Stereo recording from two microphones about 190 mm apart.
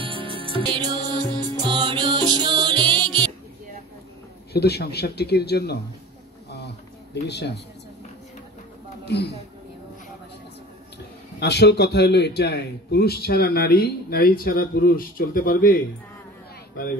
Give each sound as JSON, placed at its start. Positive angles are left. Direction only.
{"t": 0.0, "sound": "music", "side_deg": -25}
{"t": 3.1, "sound": "music", "side_deg": 5}
{"t": 4.5, "sound": "a man's voice", "side_deg": 60}
{"t": 7.2, "sound": "a man's voice", "side_deg": 60}
{"t": 11.3, "sound": "a man's voice", "side_deg": 60}